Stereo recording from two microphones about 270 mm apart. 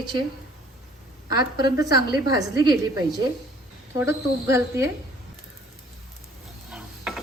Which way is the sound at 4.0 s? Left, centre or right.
Centre.